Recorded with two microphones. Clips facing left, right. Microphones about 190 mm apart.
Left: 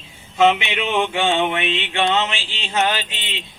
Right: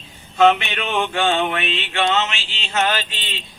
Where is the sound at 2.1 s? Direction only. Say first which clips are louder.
Left 1 dB; 15° left (ahead or behind).